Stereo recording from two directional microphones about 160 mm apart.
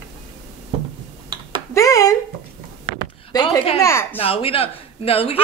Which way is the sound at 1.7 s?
20° left (ahead or behind).